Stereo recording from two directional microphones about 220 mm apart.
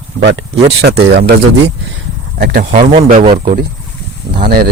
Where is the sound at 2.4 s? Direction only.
45° right (ahead or behind).